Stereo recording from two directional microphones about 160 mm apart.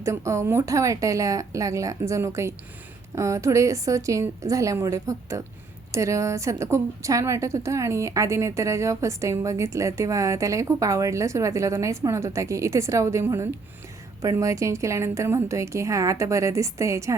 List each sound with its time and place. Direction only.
0.0 s a woman's voice: 20° right (ahead or behind)